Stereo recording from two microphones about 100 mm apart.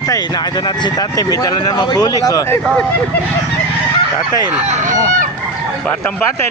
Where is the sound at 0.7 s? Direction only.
40° left (ahead or behind).